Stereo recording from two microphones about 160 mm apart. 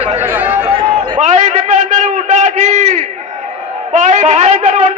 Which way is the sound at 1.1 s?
50° right (ahead or behind).